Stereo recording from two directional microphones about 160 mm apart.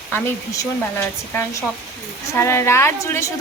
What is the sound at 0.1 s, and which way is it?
A woman's voice, 20° left (ahead or behind).